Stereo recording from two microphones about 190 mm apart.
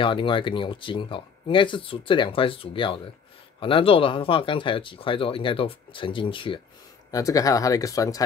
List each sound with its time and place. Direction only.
0.0 s speech: 25° left (ahead or behind)